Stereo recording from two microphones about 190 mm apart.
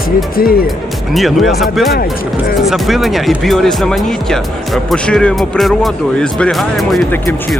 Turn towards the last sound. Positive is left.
turn(degrees=5)  # may be behind; listen again after turning